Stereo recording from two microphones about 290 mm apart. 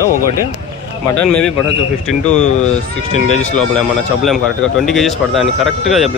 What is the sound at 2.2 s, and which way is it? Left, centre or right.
Speech, left.